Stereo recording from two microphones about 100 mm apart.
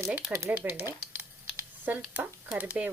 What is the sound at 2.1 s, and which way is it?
Speech, 15° right (ahead or behind).